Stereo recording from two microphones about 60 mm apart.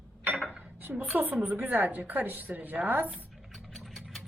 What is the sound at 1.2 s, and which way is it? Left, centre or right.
A woman's voice, right.